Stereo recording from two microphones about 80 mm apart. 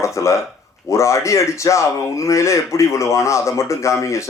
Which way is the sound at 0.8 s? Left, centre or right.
Left.